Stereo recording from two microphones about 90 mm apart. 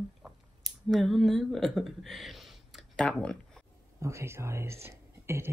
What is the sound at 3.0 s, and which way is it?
Speech, 10° left (ahead or behind).